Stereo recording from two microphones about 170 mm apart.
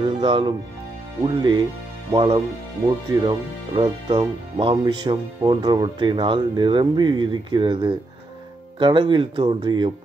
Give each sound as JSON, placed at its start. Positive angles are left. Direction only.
{"t": 0.0, "sound": "speech", "side_deg": -30}